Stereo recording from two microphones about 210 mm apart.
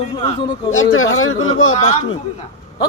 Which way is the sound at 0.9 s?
75° left (ahead or behind).